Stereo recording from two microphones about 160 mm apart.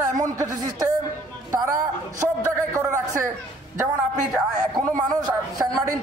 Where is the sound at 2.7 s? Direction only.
20° right (ahead or behind).